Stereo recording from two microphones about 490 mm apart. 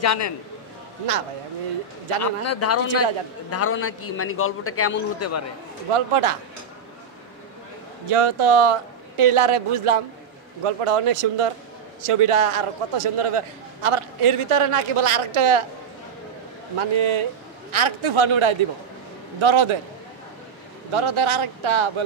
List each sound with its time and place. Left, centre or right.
0.0 s a man's voice: left
2.2 s a man's voice: left
5.9 s speech: right
8.1 s a woman's voice: right
16.7 s speech: right
20.9 s speech: right